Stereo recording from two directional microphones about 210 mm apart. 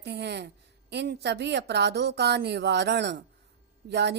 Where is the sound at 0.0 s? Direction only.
55° right (ahead or behind).